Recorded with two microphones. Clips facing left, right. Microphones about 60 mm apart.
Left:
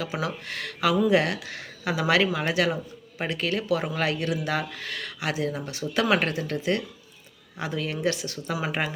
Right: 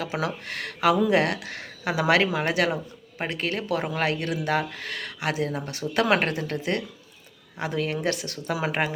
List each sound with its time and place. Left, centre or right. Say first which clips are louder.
0.2 s speech: right 1 dB; right
8.8 s speech: right 3 dB; right